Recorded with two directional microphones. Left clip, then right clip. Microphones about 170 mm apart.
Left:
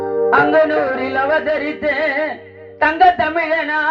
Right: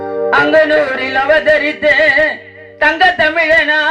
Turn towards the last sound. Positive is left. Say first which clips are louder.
# right 7 dB
turn(degrees=-35)  # may be behind; listen again after turning